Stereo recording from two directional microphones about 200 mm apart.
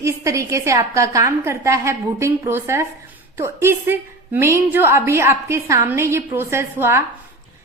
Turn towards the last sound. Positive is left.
turn(degrees=-15)  # may be behind; listen again after turning